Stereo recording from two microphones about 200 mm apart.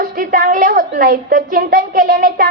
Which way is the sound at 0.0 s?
45° right (ahead or behind).